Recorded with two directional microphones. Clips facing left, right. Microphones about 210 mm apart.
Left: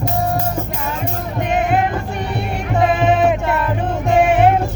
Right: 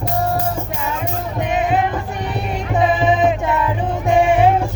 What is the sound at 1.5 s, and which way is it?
Music, 55° left (ahead or behind).